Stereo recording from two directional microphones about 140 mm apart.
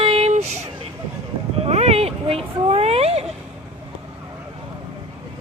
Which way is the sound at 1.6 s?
50° right (ahead or behind).